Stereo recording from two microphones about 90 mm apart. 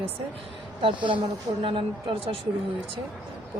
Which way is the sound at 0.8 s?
65° right (ahead or behind).